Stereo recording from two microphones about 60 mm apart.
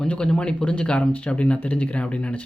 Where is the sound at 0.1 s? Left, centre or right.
Centre.